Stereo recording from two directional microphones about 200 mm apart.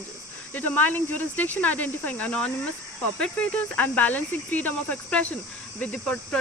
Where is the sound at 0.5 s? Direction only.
10° left (ahead or behind).